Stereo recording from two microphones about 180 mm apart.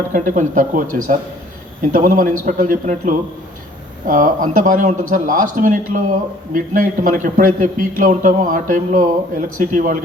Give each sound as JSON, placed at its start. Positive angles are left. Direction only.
{"t": 0.1, "sound": "a man's voice", "side_deg": -45}